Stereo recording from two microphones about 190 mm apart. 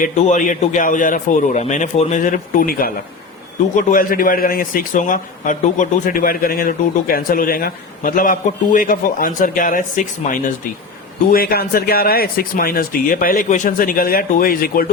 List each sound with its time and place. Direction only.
0.0 s a man's voice: 40° left (ahead or behind)